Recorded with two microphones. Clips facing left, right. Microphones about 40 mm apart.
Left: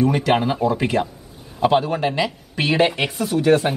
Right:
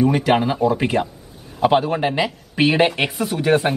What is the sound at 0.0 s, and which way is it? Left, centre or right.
Speech, centre.